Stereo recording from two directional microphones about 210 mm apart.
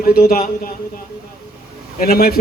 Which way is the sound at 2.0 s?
45° left (ahead or behind).